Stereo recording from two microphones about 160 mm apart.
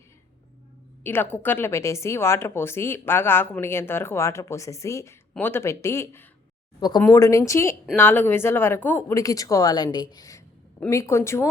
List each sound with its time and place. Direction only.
1.0 s a woman's voice: 10° left (ahead or behind)